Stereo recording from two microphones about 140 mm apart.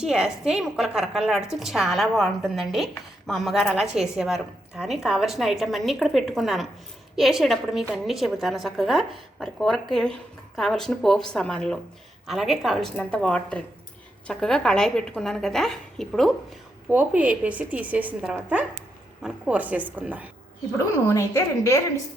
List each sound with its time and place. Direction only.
0.0 s a woman's voice: 5° right (ahead or behind)
16.9 s speech: 10° right (ahead or behind)
20.7 s a woman's voice: 20° left (ahead or behind)